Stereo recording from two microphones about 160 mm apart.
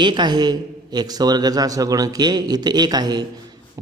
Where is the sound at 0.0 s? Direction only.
30° right (ahead or behind).